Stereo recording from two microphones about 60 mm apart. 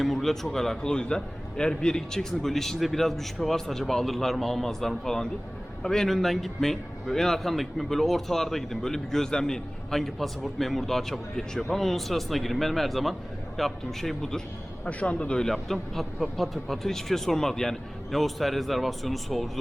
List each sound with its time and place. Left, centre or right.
0.0 s a man's voice: centre
14.8 s a man's voice: centre
15.5 s a man's voice: centre